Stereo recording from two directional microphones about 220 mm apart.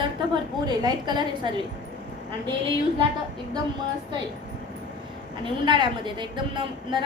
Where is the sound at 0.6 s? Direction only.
20° right (ahead or behind).